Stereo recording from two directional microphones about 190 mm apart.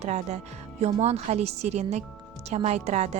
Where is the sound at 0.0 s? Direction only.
35° right (ahead or behind).